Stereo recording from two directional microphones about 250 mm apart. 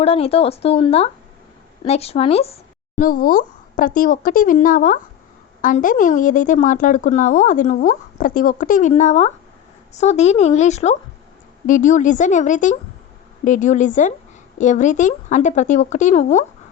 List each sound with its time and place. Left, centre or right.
0.0 s a woman's voice: left